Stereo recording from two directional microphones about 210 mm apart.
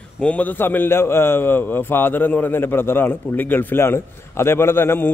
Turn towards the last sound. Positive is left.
turn(degrees=10)  # may be behind; listen again after turning